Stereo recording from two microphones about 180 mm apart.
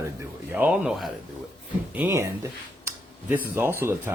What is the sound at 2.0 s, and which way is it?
Speech, 15° right (ahead or behind).